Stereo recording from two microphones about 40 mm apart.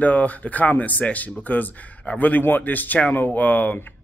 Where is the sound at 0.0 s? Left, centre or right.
Left.